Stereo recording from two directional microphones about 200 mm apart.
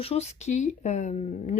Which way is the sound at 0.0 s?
30° left (ahead or behind).